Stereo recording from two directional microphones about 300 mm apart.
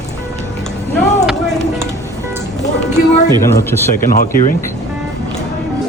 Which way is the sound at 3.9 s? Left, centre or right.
Left.